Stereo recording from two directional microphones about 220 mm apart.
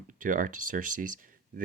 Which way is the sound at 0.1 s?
35° right (ahead or behind).